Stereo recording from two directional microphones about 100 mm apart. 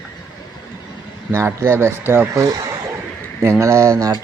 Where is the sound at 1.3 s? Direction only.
25° right (ahead or behind).